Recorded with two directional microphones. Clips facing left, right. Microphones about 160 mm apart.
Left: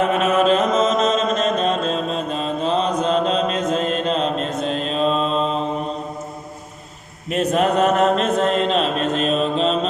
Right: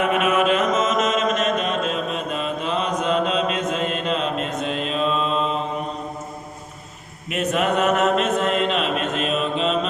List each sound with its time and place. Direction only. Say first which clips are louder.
0.1 s mantra: left 2 dB; 35° left (ahead or behind)
7.3 s mantra: left 3 dB; 35° left (ahead or behind)